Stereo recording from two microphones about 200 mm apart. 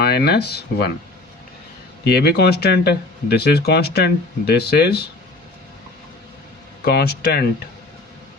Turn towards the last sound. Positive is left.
turn(degrees=50)  # may be behind; listen again after turning